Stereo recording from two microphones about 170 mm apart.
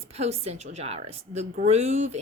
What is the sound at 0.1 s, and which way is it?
Speech, 35° right (ahead or behind).